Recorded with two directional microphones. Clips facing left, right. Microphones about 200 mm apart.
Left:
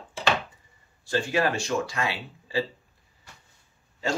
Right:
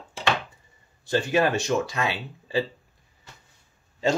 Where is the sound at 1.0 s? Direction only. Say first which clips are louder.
Right 3 dB; 20° right (ahead or behind).